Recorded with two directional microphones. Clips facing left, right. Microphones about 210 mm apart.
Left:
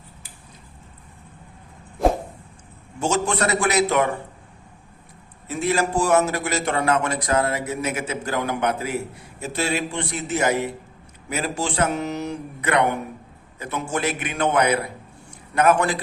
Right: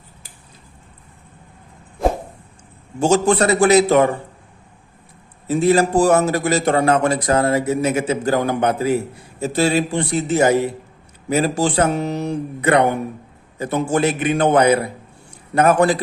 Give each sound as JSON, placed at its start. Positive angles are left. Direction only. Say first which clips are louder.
{"t": 3.0, "sound": "a man's voice", "louder": "right 7 dB", "side_deg": -35}
{"t": 5.5, "sound": "a man's voice", "louder": "right 7 dB", "side_deg": -30}